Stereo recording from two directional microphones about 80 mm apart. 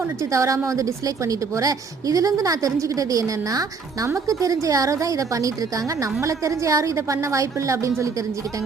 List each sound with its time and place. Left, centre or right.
0.2 s a woman's voice: right